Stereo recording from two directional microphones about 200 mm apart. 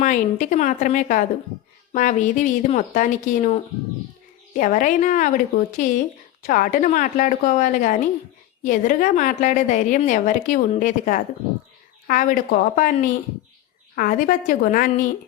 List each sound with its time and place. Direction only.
0.0 s speech: 40° left (ahead or behind)